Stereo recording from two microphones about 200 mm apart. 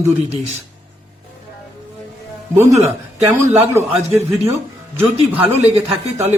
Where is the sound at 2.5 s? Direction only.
15° right (ahead or behind).